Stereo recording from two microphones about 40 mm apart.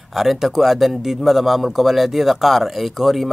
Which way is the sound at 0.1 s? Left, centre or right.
Centre.